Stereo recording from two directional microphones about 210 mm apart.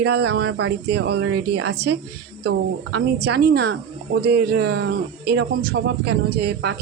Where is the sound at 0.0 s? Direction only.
50° right (ahead or behind).